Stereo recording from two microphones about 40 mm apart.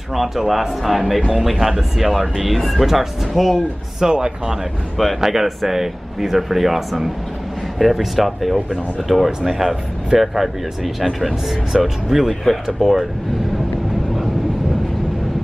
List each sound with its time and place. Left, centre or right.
0.1 s speech: centre
4.0 s speech: centre
9.5 s speech: centre